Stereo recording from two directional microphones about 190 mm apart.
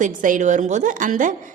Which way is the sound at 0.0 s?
45° right (ahead or behind).